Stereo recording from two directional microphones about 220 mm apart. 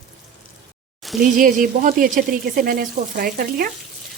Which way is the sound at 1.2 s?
40° right (ahead or behind).